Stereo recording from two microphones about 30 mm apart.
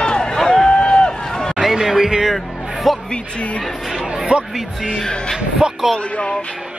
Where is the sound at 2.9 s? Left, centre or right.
Centre.